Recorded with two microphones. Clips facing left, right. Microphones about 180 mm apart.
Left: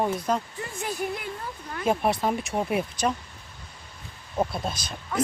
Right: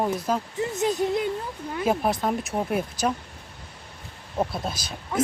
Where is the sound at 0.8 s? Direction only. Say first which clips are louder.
Right 7 dB; 20° right (ahead or behind).